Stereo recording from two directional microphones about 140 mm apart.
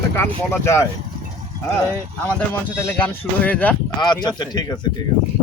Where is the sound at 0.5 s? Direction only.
20° left (ahead or behind).